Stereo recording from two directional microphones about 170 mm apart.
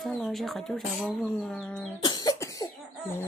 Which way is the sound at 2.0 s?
20° left (ahead or behind).